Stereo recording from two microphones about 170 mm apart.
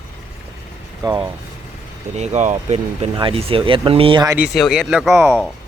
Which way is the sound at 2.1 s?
40° right (ahead or behind).